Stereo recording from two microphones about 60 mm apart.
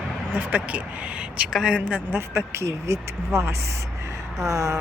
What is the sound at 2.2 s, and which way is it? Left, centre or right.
Speech, right.